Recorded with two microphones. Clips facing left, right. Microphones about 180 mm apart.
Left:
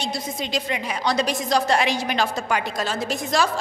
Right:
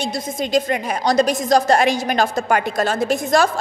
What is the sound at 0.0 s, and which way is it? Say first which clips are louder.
A woman's voice: right 5 dB; 50° right (ahead or behind).